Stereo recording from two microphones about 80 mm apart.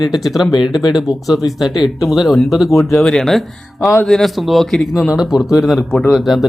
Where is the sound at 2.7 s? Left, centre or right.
Left.